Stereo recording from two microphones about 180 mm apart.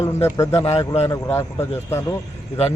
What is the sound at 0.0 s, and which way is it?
A man's voice, 15° left (ahead or behind).